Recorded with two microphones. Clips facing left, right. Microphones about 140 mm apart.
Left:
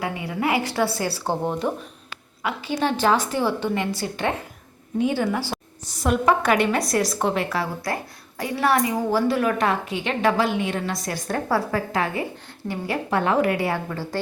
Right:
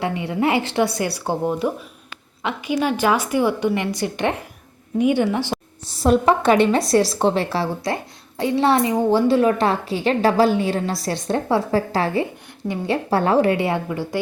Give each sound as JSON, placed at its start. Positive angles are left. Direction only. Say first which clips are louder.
{"t": 0.0, "sound": "a woman's voice", "louder": "right 4 dB", "side_deg": -25}
{"t": 12.6, "sound": "a woman's voice", "louder": "right 5 dB", "side_deg": -20}
{"t": 13.1, "sound": "a woman's voice", "louder": "right 3 dB", "side_deg": -35}